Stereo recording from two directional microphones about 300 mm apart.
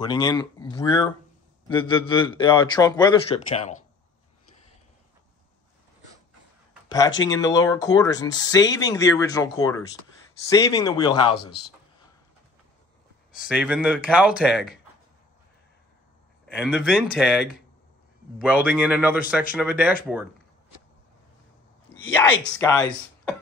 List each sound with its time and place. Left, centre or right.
0.0 s speech: centre
7.2 s speech: centre
13.3 s speech: centre
16.5 s speech: centre
18.5 s speech: centre
21.9 s a sound: centre
22.5 s speech: centre